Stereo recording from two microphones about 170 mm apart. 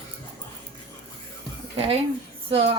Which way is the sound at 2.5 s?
35° right (ahead or behind).